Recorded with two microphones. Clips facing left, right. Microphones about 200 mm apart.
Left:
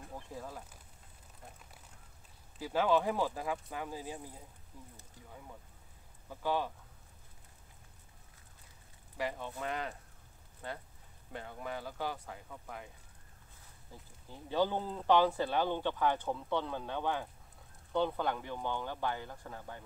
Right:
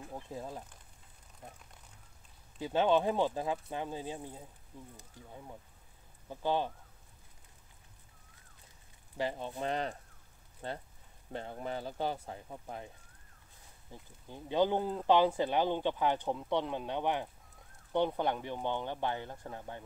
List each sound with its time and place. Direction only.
0.1 s speech: 20° right (ahead or behind)
2.6 s speech: 25° right (ahead or behind)
6.2 s speech: 25° right (ahead or behind)
9.1 s speech: 30° right (ahead or behind)
14.5 s speech: 15° right (ahead or behind)